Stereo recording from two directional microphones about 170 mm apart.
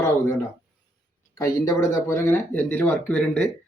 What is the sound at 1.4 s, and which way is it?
Speech, 20° left (ahead or behind).